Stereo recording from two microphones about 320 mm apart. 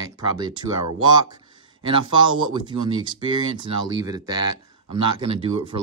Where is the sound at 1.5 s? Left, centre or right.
Centre.